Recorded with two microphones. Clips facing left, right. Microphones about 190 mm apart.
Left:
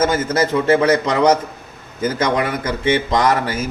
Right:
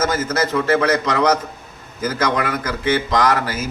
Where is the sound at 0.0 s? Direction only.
30° left (ahead or behind).